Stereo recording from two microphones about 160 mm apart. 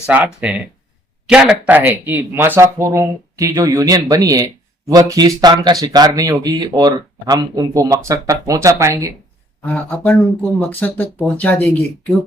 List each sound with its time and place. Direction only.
0.0 s speech: 10° right (ahead or behind)
9.6 s speech: 10° left (ahead or behind)